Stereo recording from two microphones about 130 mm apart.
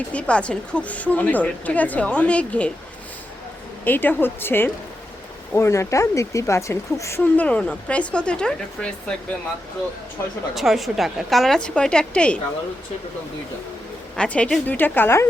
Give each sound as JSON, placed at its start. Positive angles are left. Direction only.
{"t": 0.1, "sound": "speech", "side_deg": 10}
{"t": 3.8, "sound": "speech", "side_deg": 15}
{"t": 10.5, "sound": "a woman's voice", "side_deg": 0}
{"t": 14.2, "sound": "speech", "side_deg": 10}